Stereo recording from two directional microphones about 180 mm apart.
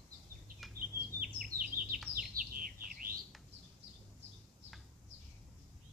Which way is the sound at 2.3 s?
50° right (ahead or behind).